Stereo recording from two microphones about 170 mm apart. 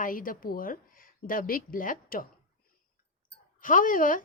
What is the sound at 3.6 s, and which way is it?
Speech, 50° left (ahead or behind).